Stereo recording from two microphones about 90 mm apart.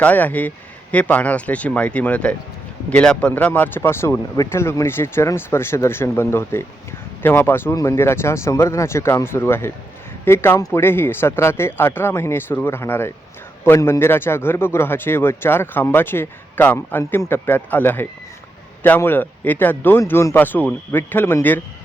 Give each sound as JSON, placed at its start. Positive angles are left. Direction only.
{"t": 0.0, "sound": "a man's voice", "side_deg": 20}
{"t": 20.0, "sound": "a man's voice", "side_deg": 30}